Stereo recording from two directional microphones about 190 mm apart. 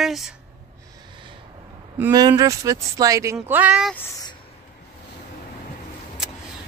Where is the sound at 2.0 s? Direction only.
20° right (ahead or behind).